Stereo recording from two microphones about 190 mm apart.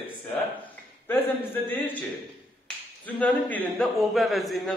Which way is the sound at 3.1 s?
10° left (ahead or behind).